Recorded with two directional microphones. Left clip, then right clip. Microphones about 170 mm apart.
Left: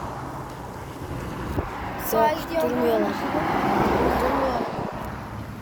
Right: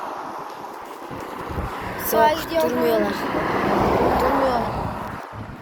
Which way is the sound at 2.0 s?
50° right (ahead or behind).